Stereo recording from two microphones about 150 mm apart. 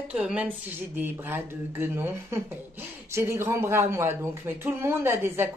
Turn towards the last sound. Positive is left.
turn(degrees=-15)  # may be behind; listen again after turning